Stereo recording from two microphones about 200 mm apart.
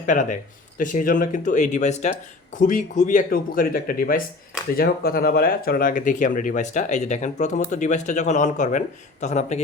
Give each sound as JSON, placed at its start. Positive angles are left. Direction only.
{"t": 0.0, "sound": "speech", "side_deg": 40}